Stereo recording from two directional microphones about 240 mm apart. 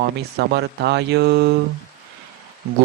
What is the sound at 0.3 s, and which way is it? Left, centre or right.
Speech, right.